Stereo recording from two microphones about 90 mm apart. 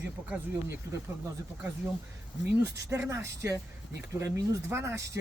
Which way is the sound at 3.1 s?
35° right (ahead or behind).